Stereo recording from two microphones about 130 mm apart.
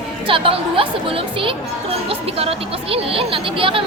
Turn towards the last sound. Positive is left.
turn(degrees=-45)  # may be behind; listen again after turning